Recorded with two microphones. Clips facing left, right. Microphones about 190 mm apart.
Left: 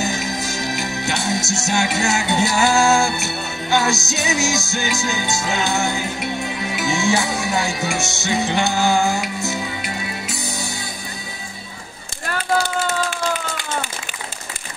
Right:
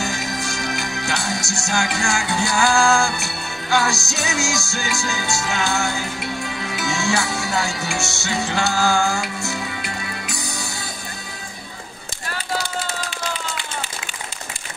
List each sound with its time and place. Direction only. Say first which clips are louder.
0.0 s music: left 2 dB; 20° left (ahead or behind)